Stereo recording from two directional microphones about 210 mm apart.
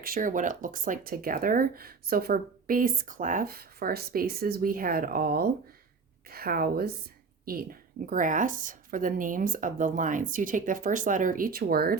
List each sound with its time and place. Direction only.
0.0 s a woman's voice: 40° right (ahead or behind)